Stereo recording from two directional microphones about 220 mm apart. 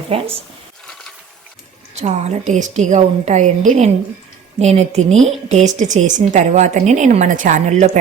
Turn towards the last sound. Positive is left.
turn(degrees=-30)  # may be behind; listen again after turning